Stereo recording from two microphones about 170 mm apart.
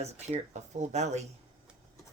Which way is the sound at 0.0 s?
40° right (ahead or behind).